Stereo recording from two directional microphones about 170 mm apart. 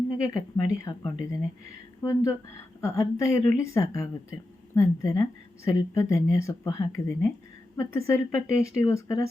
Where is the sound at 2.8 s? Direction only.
20° left (ahead or behind).